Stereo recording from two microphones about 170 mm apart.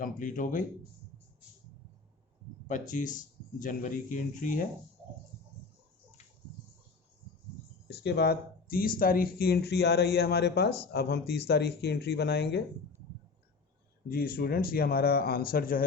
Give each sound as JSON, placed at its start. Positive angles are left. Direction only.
{"t": 0.0, "sound": "speech", "side_deg": 50}
{"t": 2.6, "sound": "speech", "side_deg": 50}
{"t": 7.9, "sound": "speech", "side_deg": 75}
{"t": 14.1, "sound": "speech", "side_deg": 60}